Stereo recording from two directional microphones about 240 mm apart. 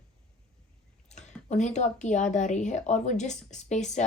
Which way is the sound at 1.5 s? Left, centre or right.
Left.